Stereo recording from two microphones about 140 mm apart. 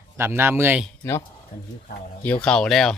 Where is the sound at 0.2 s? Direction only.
15° right (ahead or behind).